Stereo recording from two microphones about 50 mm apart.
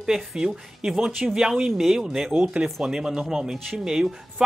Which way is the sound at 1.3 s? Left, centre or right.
Centre.